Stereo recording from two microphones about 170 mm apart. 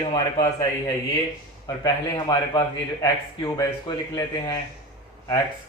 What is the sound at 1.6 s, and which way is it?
A man's voice, 20° left (ahead or behind).